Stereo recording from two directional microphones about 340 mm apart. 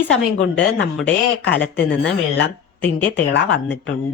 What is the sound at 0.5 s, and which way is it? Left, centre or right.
Speech, centre.